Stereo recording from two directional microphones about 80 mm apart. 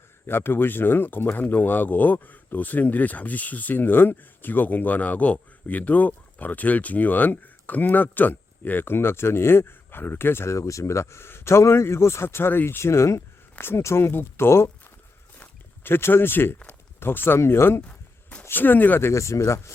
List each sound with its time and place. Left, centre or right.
0.3 s speech: left
17.8 s a sound: centre
18.4 s speech: left